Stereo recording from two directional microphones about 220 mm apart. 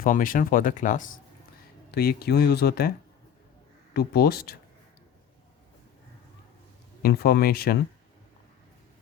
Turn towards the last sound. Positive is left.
turn(degrees=45)  # may be behind; listen again after turning